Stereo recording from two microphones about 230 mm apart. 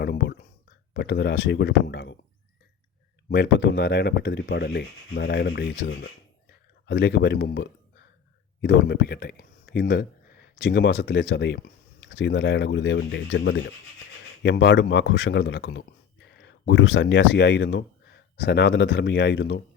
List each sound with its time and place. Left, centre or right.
0.0 s a sound: left
0.9 s speech: left
3.2 s speech: left